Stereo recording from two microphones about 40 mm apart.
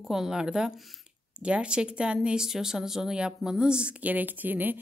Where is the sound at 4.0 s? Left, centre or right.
Right.